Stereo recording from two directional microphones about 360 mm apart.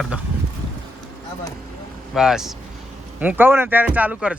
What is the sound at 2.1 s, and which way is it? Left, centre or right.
Speech, centre.